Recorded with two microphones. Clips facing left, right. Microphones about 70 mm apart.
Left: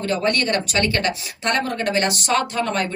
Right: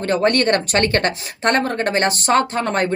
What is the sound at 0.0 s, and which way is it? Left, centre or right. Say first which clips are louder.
A woman's voice: right 4 dB; right.